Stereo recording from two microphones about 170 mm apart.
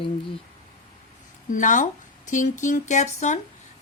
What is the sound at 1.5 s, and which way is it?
Speech, 50° left (ahead or behind).